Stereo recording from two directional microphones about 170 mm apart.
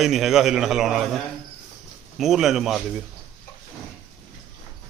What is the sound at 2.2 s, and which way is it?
Speech, centre (ahead or behind).